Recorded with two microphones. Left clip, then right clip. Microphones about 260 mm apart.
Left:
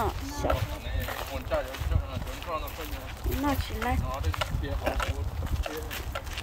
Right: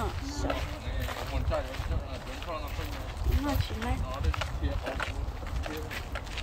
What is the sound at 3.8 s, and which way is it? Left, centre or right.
Speech, centre.